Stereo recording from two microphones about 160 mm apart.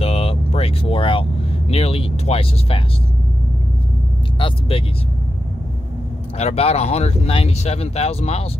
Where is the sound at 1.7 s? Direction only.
40° left (ahead or behind).